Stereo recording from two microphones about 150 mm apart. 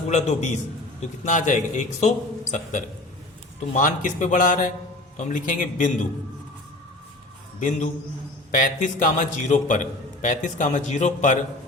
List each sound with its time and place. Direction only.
0.1 s a man's voice: 50° left (ahead or behind)
8.5 s a man's voice: 60° left (ahead or behind)